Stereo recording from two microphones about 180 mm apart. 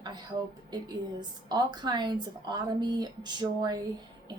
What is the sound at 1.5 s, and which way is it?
A woman's voice, 25° right (ahead or behind).